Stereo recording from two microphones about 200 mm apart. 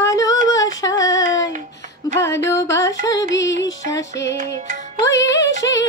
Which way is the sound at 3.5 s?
60° left (ahead or behind).